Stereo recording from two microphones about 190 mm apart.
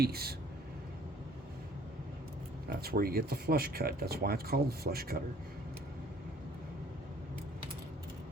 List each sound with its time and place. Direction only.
0.0 s speech: 55° right (ahead or behind)
2.6 s speech: 55° right (ahead or behind)